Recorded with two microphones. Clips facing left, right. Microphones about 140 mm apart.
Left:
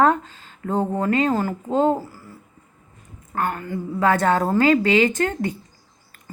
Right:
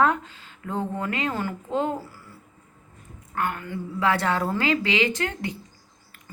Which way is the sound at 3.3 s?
45° left (ahead or behind).